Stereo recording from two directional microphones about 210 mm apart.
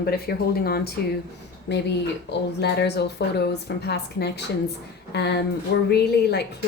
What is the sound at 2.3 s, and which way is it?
A woman's voice, 55° left (ahead or behind).